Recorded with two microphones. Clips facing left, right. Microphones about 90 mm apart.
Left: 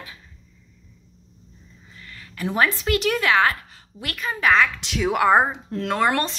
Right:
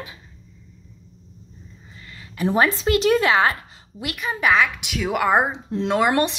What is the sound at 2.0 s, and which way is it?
A woman's voice, 20° right (ahead or behind).